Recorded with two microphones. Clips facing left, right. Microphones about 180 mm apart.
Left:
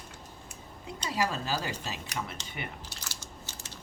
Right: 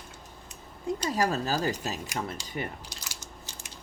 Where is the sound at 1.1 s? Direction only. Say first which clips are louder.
Right 2 dB; 45° right (ahead or behind).